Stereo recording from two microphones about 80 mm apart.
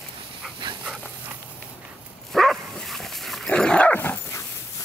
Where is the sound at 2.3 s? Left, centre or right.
Centre.